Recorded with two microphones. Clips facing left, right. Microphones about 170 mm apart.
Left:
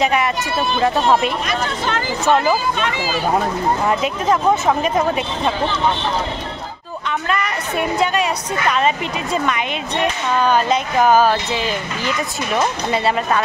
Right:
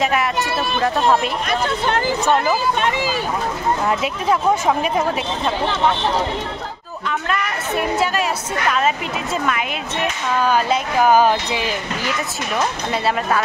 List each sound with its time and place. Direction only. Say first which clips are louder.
0.0 s speech: left 1 dB; centre (ahead or behind)
1.9 s speech: right 4 dB; 55° right (ahead or behind)
3.8 s speech: left 2 dB; 5° right (ahead or behind)
7.1 s a woman's voice: left 1 dB; 5° right (ahead or behind)
12.9 s speech: left 1 dB; centre (ahead or behind)